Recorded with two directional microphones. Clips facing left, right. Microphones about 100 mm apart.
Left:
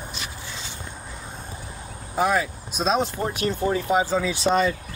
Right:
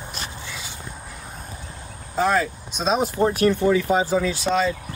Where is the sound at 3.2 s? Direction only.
40° right (ahead or behind).